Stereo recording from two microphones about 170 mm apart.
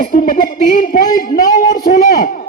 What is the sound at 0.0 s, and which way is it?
A man's voice, 55° left (ahead or behind).